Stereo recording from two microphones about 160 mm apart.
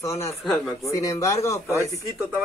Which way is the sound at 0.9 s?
20° left (ahead or behind).